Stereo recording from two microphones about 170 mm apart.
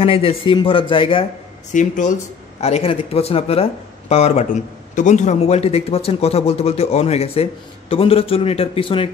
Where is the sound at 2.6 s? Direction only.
35° left (ahead or behind).